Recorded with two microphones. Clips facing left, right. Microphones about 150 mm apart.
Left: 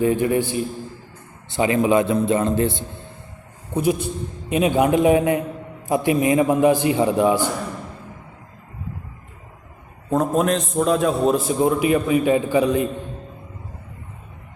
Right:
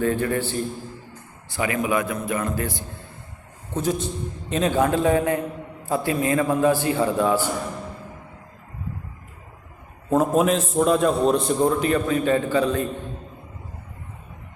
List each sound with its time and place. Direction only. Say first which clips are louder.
0.0 s a man's voice: left 4 dB; 15° left (ahead or behind)
3.8 s a man's voice: left 4 dB; 10° left (ahead or behind)
10.1 s a man's voice: even; centre (ahead or behind); by 12.9 s 15° left (ahead or behind)